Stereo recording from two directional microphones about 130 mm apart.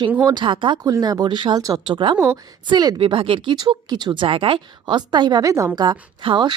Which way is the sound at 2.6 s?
30° right (ahead or behind).